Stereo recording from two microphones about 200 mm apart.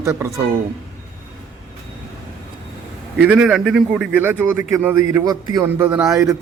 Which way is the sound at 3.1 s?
5° right (ahead or behind).